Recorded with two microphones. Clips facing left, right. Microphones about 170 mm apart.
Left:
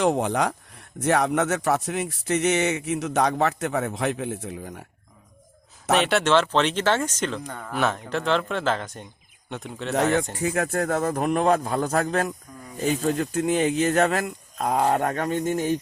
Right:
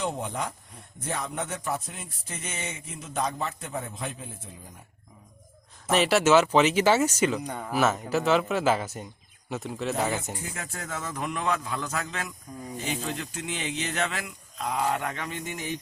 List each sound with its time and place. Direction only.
0.0 s speech: 85° left
6.0 s speech: centre (ahead or behind)
9.9 s speech: 75° left (ahead or behind); by 15.8 s 45° left (ahead or behind)